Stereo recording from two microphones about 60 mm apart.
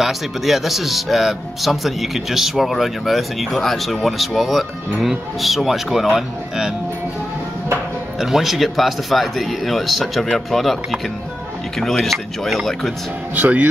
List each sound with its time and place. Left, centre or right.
0.0 s speech: centre
8.2 s speech: centre
13.3 s speech: right